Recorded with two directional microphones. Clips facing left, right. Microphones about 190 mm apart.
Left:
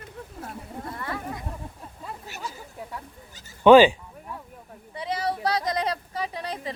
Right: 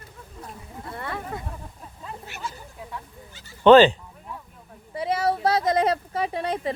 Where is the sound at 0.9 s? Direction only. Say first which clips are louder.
Right 2 dB; 30° right (ahead or behind).